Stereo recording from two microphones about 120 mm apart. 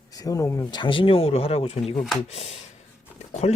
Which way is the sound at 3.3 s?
65° left (ahead or behind).